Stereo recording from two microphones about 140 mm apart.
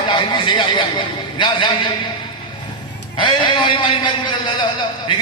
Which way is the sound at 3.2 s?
35° left (ahead or behind).